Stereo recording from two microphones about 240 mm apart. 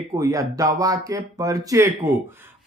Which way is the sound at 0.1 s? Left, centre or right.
Centre.